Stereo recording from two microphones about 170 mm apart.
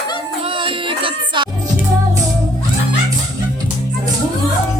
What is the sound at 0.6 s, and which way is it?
Music, 30° right (ahead or behind).